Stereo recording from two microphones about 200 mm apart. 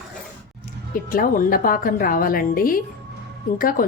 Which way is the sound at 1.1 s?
45° left (ahead or behind).